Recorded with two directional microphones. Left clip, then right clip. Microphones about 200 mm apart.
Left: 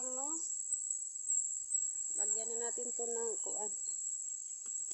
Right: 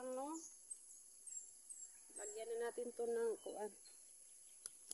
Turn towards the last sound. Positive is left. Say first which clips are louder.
# left 2 dB
turn(degrees=-20)  # may be behind; listen again after turning